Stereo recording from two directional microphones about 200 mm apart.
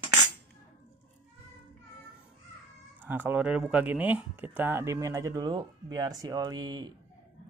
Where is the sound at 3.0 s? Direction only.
10° right (ahead or behind).